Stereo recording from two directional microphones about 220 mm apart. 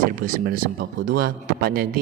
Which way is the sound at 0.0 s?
40° right (ahead or behind).